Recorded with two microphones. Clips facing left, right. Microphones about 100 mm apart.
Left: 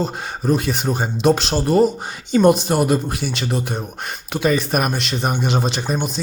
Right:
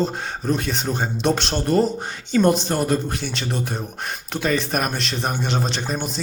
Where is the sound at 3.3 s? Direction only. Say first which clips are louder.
Left 3 dB; 5° left (ahead or behind).